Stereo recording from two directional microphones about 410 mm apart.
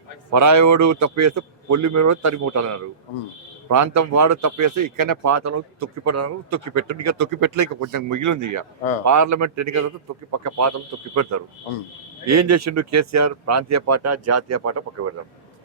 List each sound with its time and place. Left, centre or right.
0.3 s a man's voice: right